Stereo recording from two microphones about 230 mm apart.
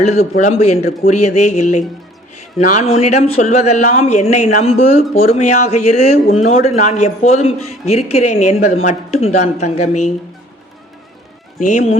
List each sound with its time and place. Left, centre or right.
0.0 s a man's voice: left
11.6 s speech: left